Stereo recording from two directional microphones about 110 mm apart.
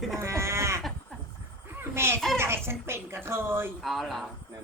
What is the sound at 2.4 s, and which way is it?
A woman's voice, 20° right (ahead or behind).